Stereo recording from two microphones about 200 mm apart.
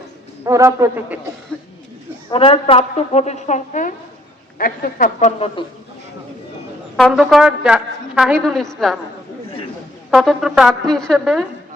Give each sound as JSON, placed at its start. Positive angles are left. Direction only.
{"t": 0.4, "sound": "speech", "side_deg": -15}
{"t": 2.3, "sound": "a woman's voice", "side_deg": 25}
{"t": 6.9, "sound": "a woman's voice", "side_deg": 0}
{"t": 10.1, "sound": "a woman's voice", "side_deg": 0}